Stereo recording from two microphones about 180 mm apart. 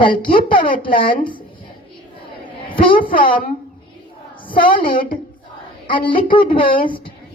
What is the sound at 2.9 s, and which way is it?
Speech, 50° left (ahead or behind).